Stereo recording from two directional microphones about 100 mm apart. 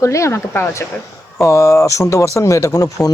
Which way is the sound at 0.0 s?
30° left (ahead or behind).